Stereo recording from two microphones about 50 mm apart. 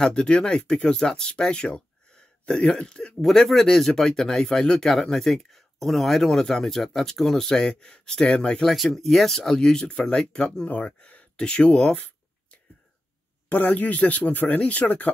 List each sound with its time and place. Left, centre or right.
0.0 s speech: centre
3.2 s speech: centre
8.6 s speech: centre
10.7 s speech: left
11.0 s a sound: left
13.5 s speech: left